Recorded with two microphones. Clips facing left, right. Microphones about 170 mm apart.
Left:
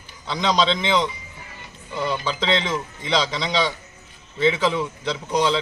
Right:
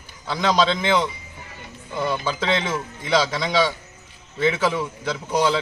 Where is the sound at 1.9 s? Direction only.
10° right (ahead or behind).